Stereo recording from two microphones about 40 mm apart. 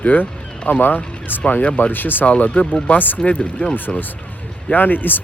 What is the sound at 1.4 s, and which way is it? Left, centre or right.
Speech, left.